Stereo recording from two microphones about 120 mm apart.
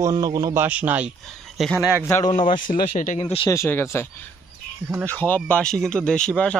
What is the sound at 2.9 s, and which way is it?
Speech, 80° left.